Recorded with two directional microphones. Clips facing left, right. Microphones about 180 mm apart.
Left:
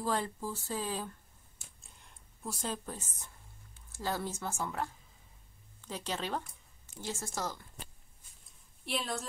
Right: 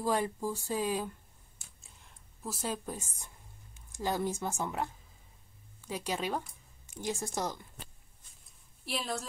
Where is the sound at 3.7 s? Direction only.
15° right (ahead or behind).